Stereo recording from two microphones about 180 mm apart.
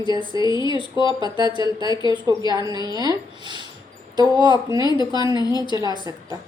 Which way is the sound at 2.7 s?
20° left (ahead or behind).